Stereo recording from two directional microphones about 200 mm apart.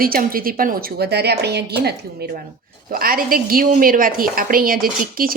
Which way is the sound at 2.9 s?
45° right (ahead or behind).